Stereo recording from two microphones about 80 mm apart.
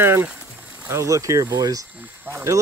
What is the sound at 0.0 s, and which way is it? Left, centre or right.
Speech, right.